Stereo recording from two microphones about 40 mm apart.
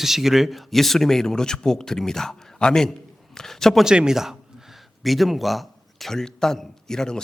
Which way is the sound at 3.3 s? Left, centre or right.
Centre.